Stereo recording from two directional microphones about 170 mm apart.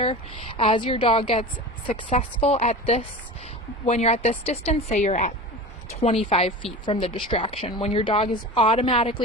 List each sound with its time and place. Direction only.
0.0 s a woman's voice: 35° left (ahead or behind)